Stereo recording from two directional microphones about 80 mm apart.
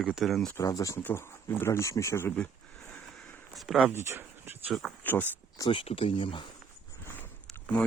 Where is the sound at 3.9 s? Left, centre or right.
Right.